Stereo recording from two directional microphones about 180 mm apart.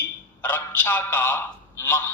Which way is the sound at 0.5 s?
10° left (ahead or behind).